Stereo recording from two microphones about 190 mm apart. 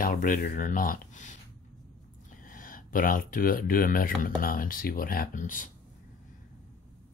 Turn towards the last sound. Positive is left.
turn(degrees=45)  # may be behind; listen again after turning